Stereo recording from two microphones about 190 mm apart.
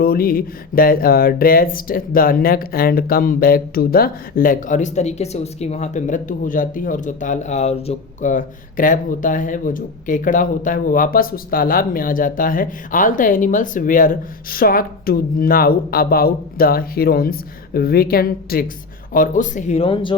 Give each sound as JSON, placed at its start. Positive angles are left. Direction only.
{"t": 0.0, "sound": "speech", "side_deg": 50}